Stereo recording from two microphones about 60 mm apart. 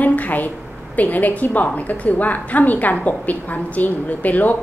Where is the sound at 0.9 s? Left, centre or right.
Left.